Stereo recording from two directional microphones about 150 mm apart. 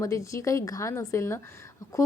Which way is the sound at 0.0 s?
20° left (ahead or behind).